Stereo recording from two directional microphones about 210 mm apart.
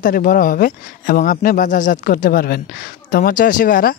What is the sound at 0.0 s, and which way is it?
Speech, 40° left (ahead or behind).